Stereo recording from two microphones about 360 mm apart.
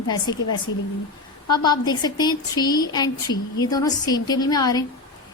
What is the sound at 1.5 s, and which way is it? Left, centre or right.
A woman's voice, centre.